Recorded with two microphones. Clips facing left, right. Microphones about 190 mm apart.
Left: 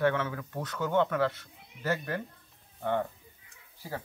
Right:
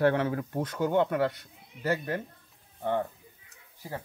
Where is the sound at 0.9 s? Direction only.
15° right (ahead or behind).